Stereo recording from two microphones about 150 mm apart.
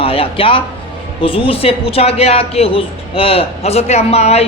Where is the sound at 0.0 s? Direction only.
40° left (ahead or behind).